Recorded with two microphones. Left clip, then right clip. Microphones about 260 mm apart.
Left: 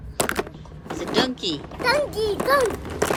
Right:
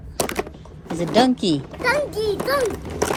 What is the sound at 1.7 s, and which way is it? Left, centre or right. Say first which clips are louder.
A child's voice: left 2 dB; centre.